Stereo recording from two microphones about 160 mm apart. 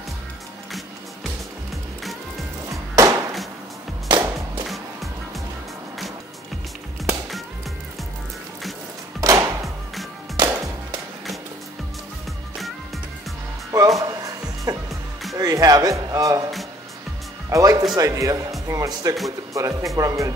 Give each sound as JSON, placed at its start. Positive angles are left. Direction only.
{"t": 4.1, "sound": "music", "side_deg": -30}
{"t": 9.2, "sound": "music", "side_deg": -20}
{"t": 13.7, "sound": "music", "side_deg": -20}
{"t": 17.5, "sound": "music", "side_deg": -20}
{"t": 17.9, "sound": "speech", "side_deg": -20}